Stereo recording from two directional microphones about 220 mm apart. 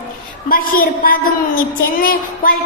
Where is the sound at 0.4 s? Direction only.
40° left (ahead or behind).